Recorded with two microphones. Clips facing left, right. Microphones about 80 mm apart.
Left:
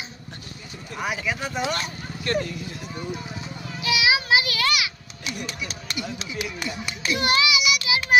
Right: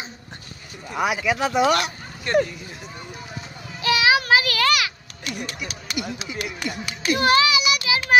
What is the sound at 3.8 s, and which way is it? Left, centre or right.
Child singing, right.